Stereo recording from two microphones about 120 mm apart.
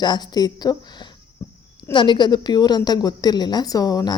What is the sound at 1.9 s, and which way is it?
A woman's voice, 40° left (ahead or behind).